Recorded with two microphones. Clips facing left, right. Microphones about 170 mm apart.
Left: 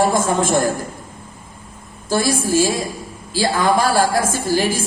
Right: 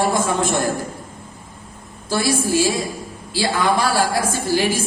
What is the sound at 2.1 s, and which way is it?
A woman's voice, 45° left (ahead or behind).